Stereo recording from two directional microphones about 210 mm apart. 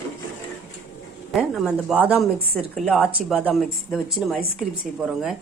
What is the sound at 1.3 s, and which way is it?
A woman's voice, centre (ahead or behind).